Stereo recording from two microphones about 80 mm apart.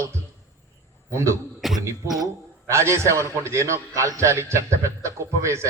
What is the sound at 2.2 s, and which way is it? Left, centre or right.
A man's voice, right.